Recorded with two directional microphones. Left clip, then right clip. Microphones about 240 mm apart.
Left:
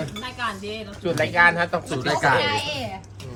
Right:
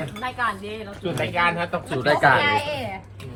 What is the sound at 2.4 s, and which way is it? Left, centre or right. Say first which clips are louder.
Speech: right 2 dB; centre.